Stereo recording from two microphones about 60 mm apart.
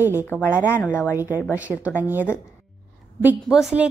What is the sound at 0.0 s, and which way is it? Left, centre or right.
Speech, right.